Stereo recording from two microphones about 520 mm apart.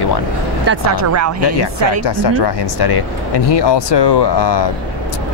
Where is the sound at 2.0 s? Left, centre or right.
Left.